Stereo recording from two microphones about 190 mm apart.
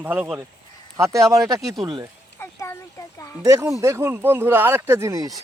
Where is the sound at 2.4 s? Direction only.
15° left (ahead or behind).